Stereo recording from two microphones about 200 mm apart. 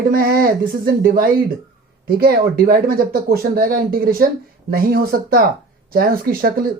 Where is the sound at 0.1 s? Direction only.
50° right (ahead or behind).